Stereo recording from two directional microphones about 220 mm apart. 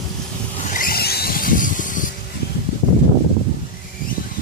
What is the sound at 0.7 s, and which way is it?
Vehicle, 45° left (ahead or behind).